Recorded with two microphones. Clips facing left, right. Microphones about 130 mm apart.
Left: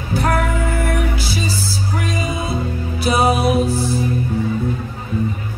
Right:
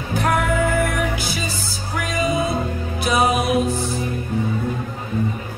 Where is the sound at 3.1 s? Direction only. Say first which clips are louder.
Left 2 dB; 30° left (ahead or behind).